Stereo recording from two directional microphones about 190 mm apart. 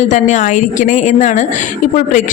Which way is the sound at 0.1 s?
40° left (ahead or behind).